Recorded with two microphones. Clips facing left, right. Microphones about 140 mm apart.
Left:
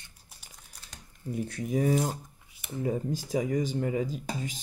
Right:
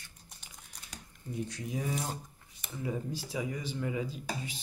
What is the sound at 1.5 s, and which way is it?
Speech, 50° left (ahead or behind).